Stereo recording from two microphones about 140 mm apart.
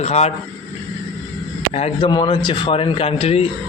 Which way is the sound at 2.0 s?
35° left (ahead or behind).